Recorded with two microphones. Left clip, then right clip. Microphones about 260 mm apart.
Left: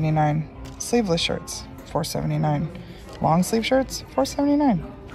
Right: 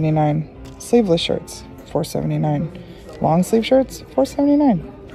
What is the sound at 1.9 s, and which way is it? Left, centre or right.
Speech, left.